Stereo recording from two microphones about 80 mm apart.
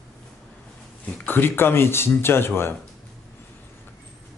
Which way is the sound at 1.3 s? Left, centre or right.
Left.